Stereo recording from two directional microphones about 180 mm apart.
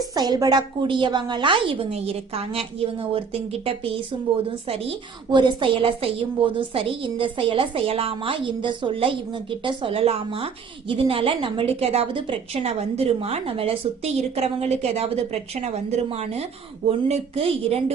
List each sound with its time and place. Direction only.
0.1 s a woman's voice: 20° right (ahead or behind)
5.3 s a woman's voice: 25° right (ahead or behind)